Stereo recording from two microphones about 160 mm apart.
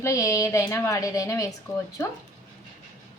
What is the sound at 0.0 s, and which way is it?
A woman's voice, 20° left (ahead or behind).